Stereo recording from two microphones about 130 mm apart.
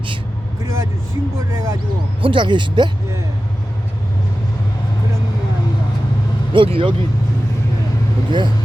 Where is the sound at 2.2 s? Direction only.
40° right (ahead or behind).